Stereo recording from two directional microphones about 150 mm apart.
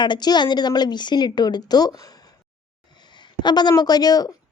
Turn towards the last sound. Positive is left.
turn(degrees=25)  # may be behind; listen again after turning